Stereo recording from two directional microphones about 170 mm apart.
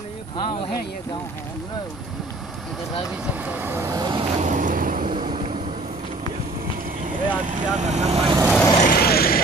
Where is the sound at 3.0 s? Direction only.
5° right (ahead or behind); by 4.2 s 25° right (ahead or behind).